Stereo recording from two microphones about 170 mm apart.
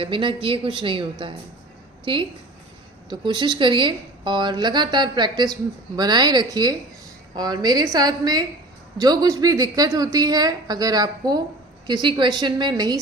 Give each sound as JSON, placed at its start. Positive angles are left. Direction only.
{"t": 0.0, "sound": "a woman's voice", "side_deg": -30}